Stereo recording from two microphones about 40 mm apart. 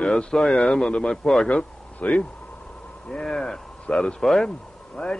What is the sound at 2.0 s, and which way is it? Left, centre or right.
Mantra, left.